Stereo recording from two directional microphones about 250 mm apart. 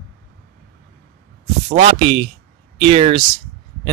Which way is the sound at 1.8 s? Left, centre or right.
Right.